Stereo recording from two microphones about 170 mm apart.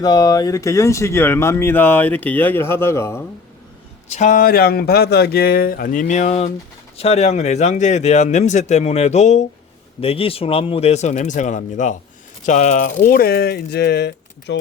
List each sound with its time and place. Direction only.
0.0 s speech: 20° left (ahead or behind)
4.1 s speech: 45° left (ahead or behind); by 14.6 s 80° left